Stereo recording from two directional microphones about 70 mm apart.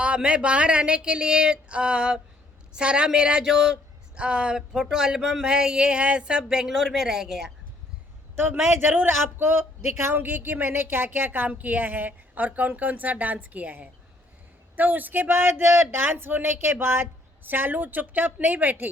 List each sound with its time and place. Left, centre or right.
0.0 s a man's voice: centre
8.8 s speech: right